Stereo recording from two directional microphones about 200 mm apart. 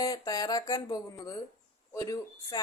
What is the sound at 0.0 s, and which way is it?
A woman's voice, 20° left (ahead or behind).